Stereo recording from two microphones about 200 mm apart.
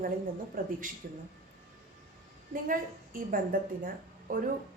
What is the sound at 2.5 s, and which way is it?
A woman's voice, 45° right (ahead or behind).